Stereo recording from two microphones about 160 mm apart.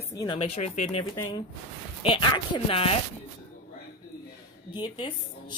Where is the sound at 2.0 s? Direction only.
30° left (ahead or behind).